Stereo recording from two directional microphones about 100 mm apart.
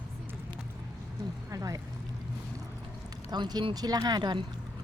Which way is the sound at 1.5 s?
35° right (ahead or behind).